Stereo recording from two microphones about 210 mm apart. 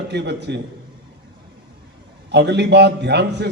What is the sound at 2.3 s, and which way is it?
A man's voice, 55° right (ahead or behind).